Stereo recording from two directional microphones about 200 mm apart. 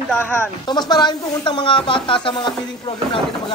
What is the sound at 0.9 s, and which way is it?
Speech, 20° left (ahead or behind).